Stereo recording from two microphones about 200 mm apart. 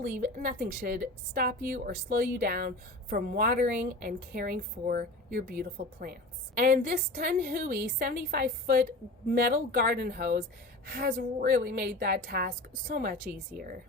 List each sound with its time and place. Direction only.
0.0 s a woman's voice: 45° right (ahead or behind)